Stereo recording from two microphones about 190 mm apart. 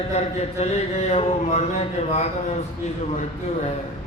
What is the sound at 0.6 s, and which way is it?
Speech, 35° left (ahead or behind).